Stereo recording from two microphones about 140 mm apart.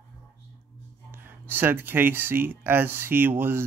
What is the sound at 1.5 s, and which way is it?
Speech, 15° right (ahead or behind).